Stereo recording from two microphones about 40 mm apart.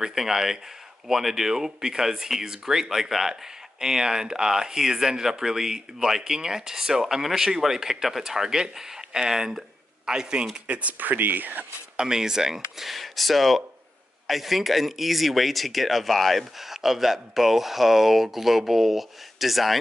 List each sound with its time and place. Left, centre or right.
0.0 s speech: centre
10.7 s speech: right
12.0 s speech: centre